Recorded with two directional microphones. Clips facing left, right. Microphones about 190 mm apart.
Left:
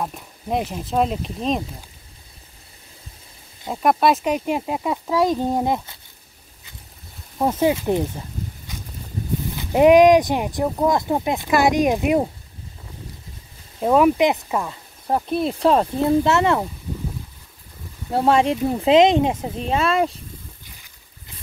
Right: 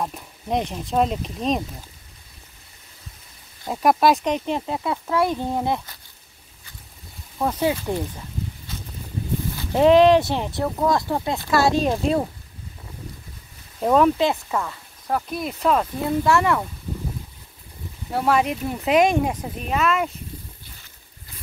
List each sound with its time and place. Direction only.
0.0 s speech: centre (ahead or behind)
3.6 s speech: centre (ahead or behind); by 5.9 s 15° left (ahead or behind)
7.7 s speech: 20° left (ahead or behind)
8.7 s a sound: 15° left (ahead or behind)
9.6 s speech: 15° left (ahead or behind)
13.7 s speech: 5° left (ahead or behind); by 16.6 s 25° left (ahead or behind)
18.1 s speech: 25° left (ahead or behind)